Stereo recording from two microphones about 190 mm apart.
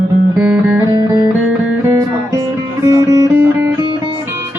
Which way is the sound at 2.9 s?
20° right (ahead or behind).